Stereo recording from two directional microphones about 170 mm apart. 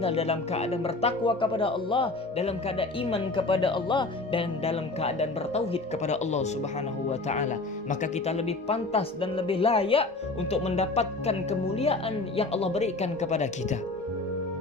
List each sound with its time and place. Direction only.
0.0 s speech: 35° left (ahead or behind)